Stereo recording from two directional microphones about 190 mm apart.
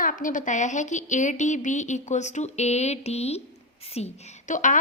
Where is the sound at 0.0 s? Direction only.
45° left (ahead or behind).